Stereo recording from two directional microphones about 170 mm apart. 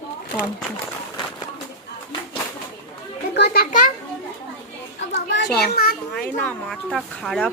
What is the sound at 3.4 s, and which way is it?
Children playing, 75° left (ahead or behind).